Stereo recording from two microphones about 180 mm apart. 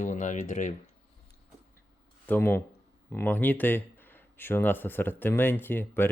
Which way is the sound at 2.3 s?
10° left (ahead or behind).